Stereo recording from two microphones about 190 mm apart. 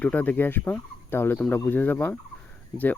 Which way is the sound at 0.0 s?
10° left (ahead or behind).